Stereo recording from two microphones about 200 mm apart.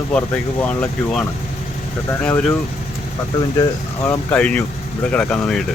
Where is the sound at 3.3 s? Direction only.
15° left (ahead or behind).